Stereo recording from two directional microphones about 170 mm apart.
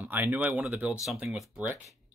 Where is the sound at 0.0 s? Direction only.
10° right (ahead or behind).